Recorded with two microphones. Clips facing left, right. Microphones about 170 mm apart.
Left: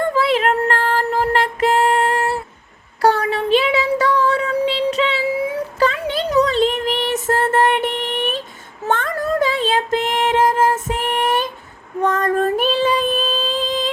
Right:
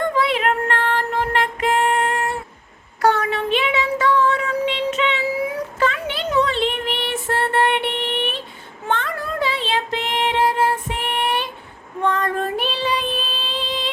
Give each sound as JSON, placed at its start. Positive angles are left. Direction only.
{"t": 0.1, "sound": "music", "side_deg": 35}
{"t": 3.0, "sound": "child singing", "side_deg": 35}